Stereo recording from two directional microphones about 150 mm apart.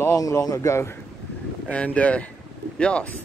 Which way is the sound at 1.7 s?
10° left (ahead or behind).